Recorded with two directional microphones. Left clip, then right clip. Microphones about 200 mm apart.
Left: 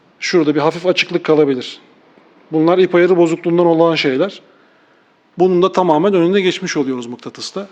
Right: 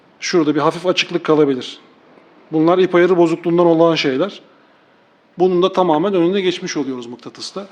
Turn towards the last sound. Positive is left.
turn(degrees=20)  # may be behind; listen again after turning